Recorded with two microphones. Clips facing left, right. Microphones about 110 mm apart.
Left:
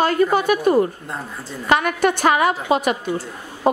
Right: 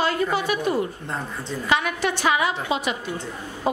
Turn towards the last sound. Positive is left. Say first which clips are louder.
# left 5 dB
turn(degrees=55)  # may be behind; listen again after turning